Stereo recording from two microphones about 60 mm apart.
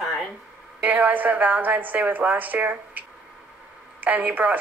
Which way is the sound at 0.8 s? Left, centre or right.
Right.